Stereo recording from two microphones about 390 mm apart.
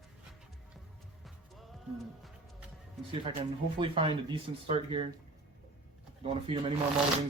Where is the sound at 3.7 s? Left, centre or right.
Centre.